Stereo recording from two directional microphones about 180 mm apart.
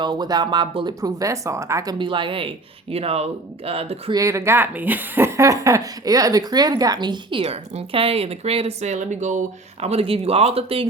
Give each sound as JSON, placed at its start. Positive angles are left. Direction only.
{"t": 0.0, "sound": "speech", "side_deg": -25}
{"t": 4.1, "sound": "speech", "side_deg": -15}